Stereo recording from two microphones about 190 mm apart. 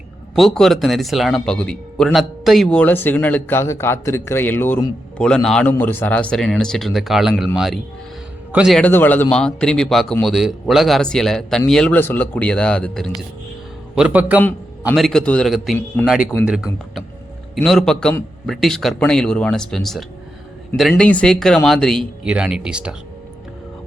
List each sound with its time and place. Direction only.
0.3 s speech: centre (ahead or behind)
8.8 s a man's voice: 10° left (ahead or behind)
13.9 s a man's voice: 5° right (ahead or behind)
14.9 s speech: centre (ahead or behind)
17.5 s speech: centre (ahead or behind)